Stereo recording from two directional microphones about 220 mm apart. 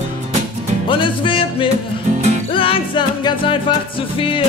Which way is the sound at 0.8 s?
20° left (ahead or behind).